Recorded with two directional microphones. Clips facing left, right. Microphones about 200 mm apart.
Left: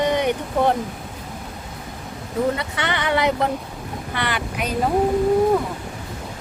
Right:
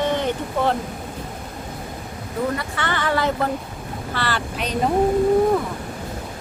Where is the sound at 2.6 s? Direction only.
20° left (ahead or behind).